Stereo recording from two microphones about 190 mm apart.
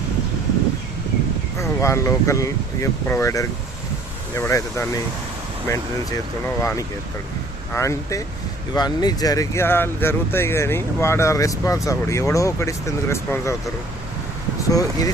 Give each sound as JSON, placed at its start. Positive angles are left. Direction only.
{"t": 1.5, "sound": "speech", "side_deg": 15}
{"t": 14.7, "sound": "speech", "side_deg": 20}